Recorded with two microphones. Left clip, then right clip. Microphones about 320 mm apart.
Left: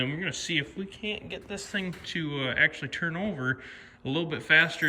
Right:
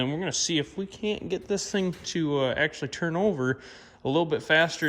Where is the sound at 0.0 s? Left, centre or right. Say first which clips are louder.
Right 3 dB; centre.